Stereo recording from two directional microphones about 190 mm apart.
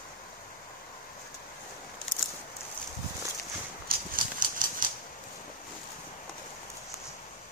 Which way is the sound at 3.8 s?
45° right (ahead or behind).